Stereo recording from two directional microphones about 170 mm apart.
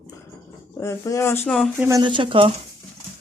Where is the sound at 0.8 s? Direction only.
15° left (ahead or behind).